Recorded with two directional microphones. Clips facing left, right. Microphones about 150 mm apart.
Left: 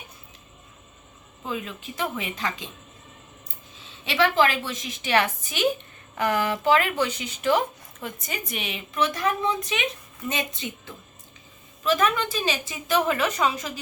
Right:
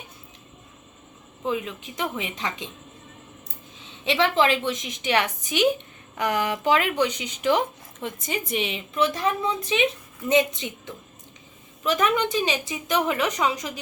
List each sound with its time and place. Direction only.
1.5 s a woman's voice: 15° right (ahead or behind)
4.0 s a woman's voice: 20° right (ahead or behind)